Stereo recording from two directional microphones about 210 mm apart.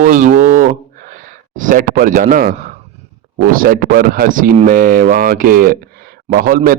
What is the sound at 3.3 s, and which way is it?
Speech, 40° right (ahead or behind).